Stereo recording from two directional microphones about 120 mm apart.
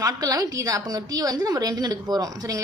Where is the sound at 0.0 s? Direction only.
30° right (ahead or behind).